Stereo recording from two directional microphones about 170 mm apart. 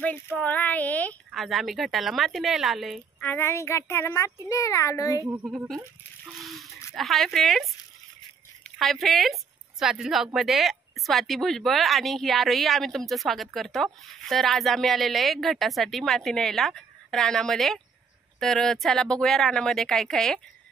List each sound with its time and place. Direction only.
0.0 s speech: 10° left (ahead or behind)
3.3 s speech: 15° left (ahead or behind)
5.2 s speech: 10° right (ahead or behind)